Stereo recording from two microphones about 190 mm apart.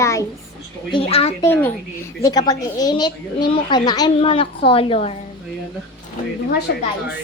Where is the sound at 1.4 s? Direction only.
10° left (ahead or behind); by 5.2 s 30° left (ahead or behind).